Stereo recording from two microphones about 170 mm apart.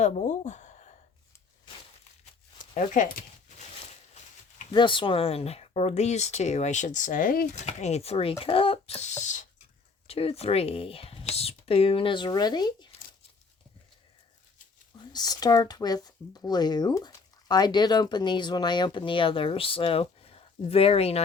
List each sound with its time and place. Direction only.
0.0 s a sound: 45° left (ahead or behind)
2.7 s speech: 45° left (ahead or behind)
4.7 s speech: 30° left (ahead or behind)
15.1 s speech: 25° left (ahead or behind)